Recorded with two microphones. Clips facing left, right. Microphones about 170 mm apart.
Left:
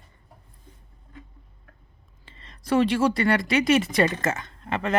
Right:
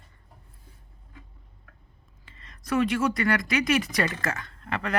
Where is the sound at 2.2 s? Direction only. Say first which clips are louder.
Left 4 dB; 30° left (ahead or behind).